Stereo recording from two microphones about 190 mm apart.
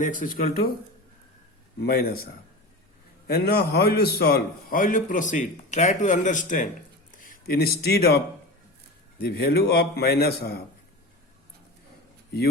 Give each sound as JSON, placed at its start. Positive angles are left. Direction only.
{"t": 0.0, "sound": "a man's voice", "side_deg": 45}
{"t": 1.8, "sound": "a man's voice", "side_deg": 55}